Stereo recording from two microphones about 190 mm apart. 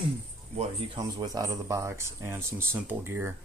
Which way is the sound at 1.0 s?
20° right (ahead or behind).